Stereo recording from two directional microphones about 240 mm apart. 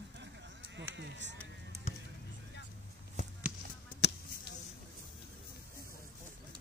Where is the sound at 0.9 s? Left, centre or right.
Right.